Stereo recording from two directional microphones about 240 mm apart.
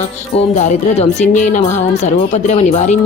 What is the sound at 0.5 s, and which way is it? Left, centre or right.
Music, left.